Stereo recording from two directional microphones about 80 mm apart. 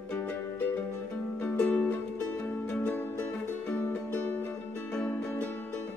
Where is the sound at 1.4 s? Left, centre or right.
Left.